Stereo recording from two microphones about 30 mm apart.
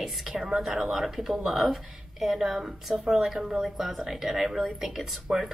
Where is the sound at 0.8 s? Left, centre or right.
Centre.